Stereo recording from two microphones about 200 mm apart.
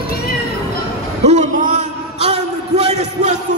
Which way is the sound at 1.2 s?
35° right (ahead or behind).